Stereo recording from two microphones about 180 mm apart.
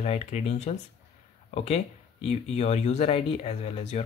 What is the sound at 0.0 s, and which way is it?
Speech, 35° left (ahead or behind).